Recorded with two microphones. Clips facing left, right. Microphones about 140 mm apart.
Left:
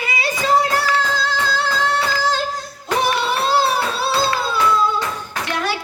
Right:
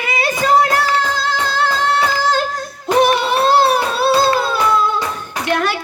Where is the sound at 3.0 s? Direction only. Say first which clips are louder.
Right 6 dB; 55° right (ahead or behind).